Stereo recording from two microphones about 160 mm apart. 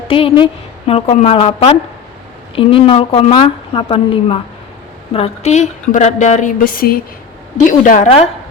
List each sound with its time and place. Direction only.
0.1 s a woman's voice: 35° left (ahead or behind)
6.7 s a woman's voice: 65° left (ahead or behind)
7.7 s a woman's voice: 55° left (ahead or behind)